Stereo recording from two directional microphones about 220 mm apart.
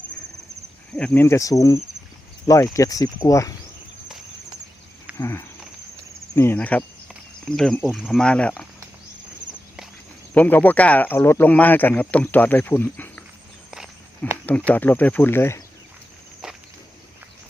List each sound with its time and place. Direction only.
0.9 s speech: 5° left (ahead or behind)
5.1 s speech: 10° left (ahead or behind)
10.3 s speech: 5° left (ahead or behind)
13.7 s walk: centre (ahead or behind)
14.7 s speech: 10° left (ahead or behind)